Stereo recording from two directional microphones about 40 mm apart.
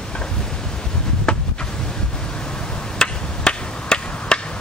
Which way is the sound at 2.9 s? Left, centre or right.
Left.